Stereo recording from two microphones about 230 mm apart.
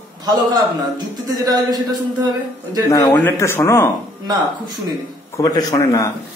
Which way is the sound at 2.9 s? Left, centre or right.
Centre.